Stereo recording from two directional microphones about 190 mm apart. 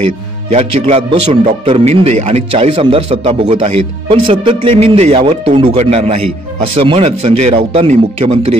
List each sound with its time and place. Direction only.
0.5 s speech: 30° right (ahead or behind)